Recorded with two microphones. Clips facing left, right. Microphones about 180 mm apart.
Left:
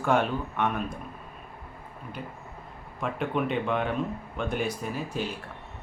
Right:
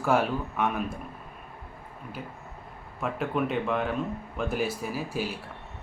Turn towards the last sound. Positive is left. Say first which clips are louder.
# even
turn(degrees=-5)  # may be behind; listen again after turning